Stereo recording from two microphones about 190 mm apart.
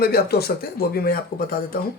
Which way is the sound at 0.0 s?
55° left (ahead or behind).